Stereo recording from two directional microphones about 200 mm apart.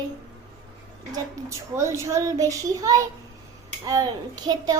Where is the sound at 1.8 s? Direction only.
15° right (ahead or behind).